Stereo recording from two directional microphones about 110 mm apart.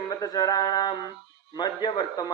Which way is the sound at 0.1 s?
35° left (ahead or behind).